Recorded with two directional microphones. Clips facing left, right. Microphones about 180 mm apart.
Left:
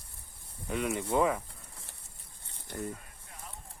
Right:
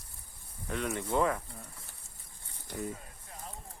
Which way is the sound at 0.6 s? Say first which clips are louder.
Left 2 dB; 5° left (ahead or behind).